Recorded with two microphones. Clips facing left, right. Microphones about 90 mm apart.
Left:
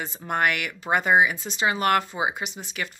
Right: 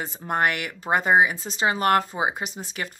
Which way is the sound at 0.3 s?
35° right (ahead or behind).